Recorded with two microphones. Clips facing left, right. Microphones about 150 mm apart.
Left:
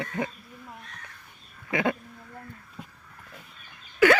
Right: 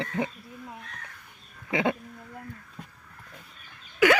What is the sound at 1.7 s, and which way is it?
Speech, 20° right (ahead or behind).